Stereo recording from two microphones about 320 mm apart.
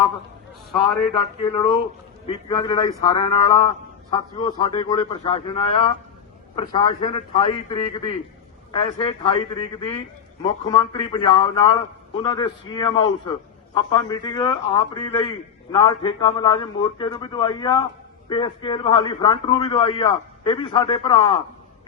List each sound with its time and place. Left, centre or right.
0.7 s a man's voice: centre
1.1 s a man's voice: centre
10.4 s a man's voice: centre